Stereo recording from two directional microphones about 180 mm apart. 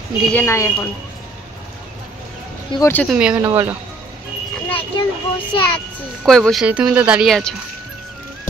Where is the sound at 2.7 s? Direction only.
15° left (ahead or behind).